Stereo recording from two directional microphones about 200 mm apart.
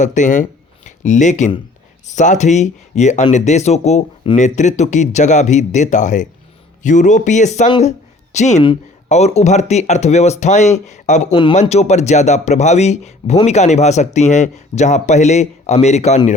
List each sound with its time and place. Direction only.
0.0 s speech: 35° left (ahead or behind)
11.3 s speech: 25° left (ahead or behind)